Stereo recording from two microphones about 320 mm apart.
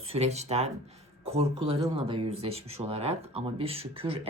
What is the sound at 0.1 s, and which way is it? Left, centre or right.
Speech, centre.